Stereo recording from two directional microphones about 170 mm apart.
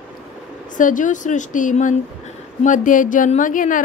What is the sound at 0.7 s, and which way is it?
A woman's voice, 50° left (ahead or behind).